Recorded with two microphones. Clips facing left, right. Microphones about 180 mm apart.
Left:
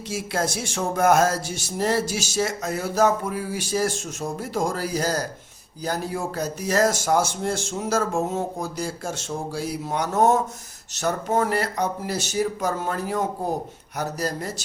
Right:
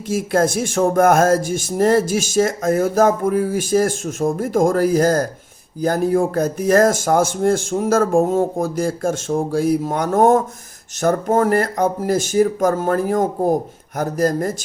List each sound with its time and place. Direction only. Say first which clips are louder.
0.1 s speech: right 9 dB; 50° right (ahead or behind)